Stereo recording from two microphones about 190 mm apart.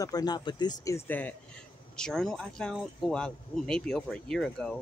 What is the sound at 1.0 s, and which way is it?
Speech, 10° left (ahead or behind).